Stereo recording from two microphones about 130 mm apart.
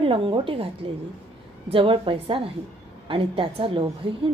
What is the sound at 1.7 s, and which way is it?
A woman's voice, 45° right (ahead or behind).